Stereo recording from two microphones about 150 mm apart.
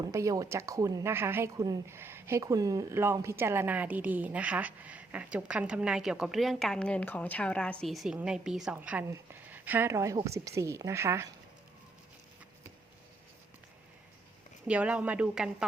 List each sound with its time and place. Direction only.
0.0 s a woman's voice: 20° right (ahead or behind)
14.7 s speech: 10° right (ahead or behind)